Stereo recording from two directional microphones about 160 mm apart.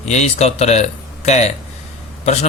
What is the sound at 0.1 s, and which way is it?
Speech, 45° left (ahead or behind).